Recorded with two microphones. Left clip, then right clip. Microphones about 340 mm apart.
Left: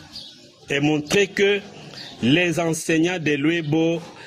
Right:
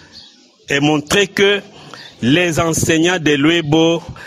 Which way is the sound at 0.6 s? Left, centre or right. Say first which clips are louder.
Right 6 dB; right.